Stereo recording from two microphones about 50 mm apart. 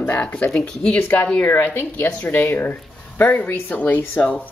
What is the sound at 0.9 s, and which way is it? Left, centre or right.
A woman's voice, left.